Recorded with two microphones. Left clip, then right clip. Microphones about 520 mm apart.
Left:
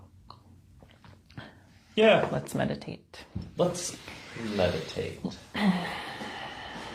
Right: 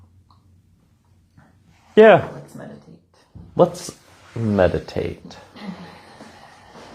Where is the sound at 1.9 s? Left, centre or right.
Right.